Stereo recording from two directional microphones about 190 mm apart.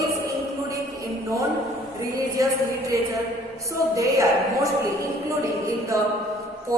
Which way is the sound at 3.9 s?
15° right (ahead or behind).